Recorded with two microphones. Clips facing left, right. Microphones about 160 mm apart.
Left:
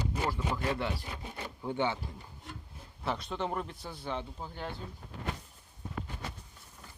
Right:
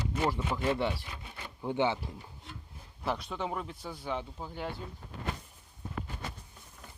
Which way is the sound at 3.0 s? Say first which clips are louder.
Even; 5° right (ahead or behind).